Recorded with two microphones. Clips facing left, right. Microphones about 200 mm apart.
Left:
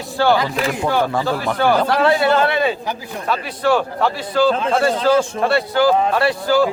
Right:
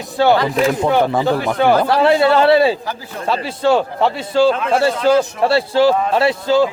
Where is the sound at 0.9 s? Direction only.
20° right (ahead or behind).